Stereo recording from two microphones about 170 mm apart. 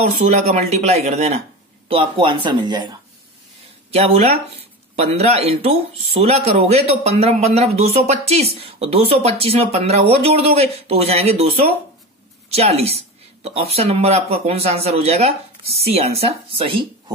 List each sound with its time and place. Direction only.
0.3 s speech: 40° right (ahead or behind)
3.9 s speech: 35° right (ahead or behind)